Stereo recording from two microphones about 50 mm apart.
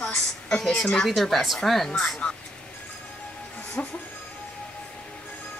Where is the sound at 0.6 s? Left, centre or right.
Centre.